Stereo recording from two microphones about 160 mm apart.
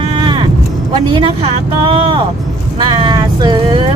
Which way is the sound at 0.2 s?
30° right (ahead or behind).